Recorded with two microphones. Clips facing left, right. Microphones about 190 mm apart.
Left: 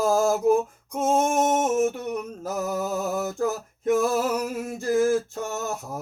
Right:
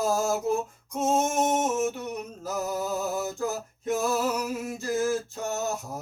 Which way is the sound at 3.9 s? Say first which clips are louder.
Left 4 dB; 55° left (ahead or behind).